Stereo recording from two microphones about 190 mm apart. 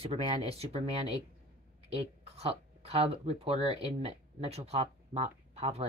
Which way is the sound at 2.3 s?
30° right (ahead or behind).